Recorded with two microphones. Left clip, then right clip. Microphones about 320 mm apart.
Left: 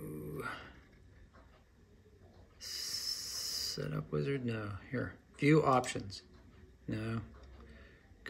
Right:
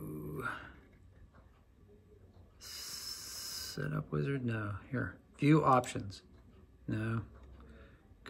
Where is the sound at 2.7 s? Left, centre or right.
Centre.